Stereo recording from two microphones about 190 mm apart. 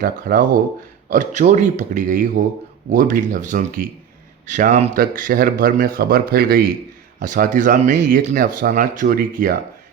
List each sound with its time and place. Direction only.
0.0 s speech: 55° right (ahead or behind)
1.1 s speech: 40° right (ahead or behind)
7.2 s speech: 45° right (ahead or behind)